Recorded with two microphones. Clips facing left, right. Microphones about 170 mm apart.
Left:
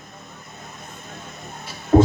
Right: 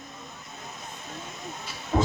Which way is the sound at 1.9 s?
50° left (ahead or behind).